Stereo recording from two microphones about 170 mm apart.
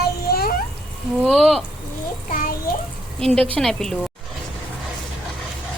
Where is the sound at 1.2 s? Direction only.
5° right (ahead or behind).